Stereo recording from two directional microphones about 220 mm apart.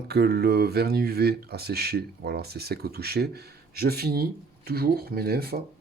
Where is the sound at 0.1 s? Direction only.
45° right (ahead or behind).